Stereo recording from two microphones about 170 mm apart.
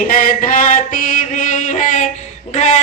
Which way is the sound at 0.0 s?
50° left (ahead or behind).